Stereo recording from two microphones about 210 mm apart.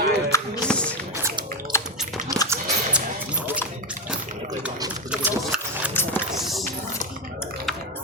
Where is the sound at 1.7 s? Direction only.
15° left (ahead or behind).